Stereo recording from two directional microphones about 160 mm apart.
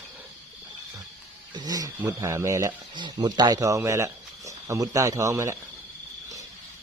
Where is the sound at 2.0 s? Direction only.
20° right (ahead or behind).